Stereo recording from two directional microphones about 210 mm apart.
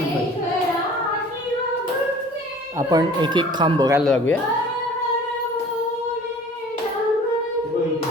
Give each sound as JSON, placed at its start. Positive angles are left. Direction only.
{"t": 2.7, "sound": "speech", "side_deg": -20}
{"t": 4.0, "sound": "speech", "side_deg": 0}